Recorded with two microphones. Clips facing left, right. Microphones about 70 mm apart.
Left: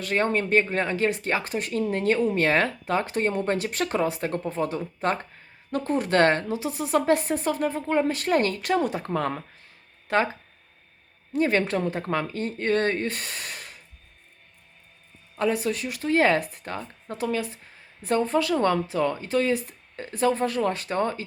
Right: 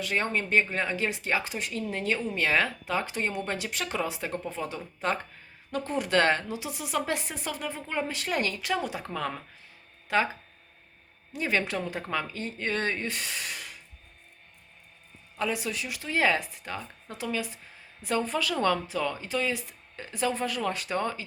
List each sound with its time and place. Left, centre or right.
0.0 s speech: left
11.3 s speech: left
15.4 s speech: left